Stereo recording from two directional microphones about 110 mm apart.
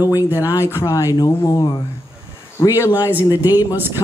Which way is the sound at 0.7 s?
30° left (ahead or behind).